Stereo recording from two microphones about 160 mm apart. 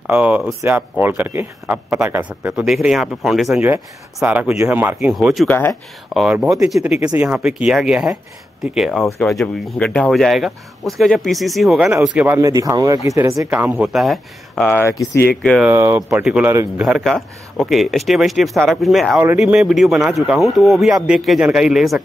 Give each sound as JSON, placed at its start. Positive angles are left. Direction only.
{"t": 0.0, "sound": "speech", "side_deg": -10}
{"t": 5.5, "sound": "speech", "side_deg": 15}
{"t": 6.1, "sound": "speech", "side_deg": 0}
{"t": 12.4, "sound": "speech", "side_deg": -20}
{"t": 15.6, "sound": "speech", "side_deg": -15}